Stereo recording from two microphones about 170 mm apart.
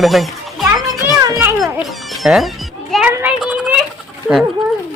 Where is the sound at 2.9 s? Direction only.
10° right (ahead or behind).